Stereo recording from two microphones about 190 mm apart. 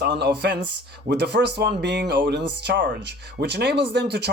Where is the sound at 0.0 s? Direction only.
60° right (ahead or behind).